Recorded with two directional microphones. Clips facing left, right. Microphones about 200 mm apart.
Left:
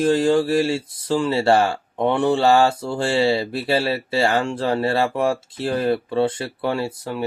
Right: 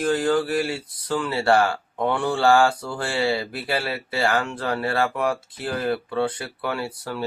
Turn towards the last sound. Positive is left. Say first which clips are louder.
# left 4 dB
turn(degrees=20)  # may be behind; listen again after turning